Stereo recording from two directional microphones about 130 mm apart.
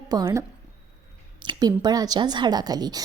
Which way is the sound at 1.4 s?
30° right (ahead or behind).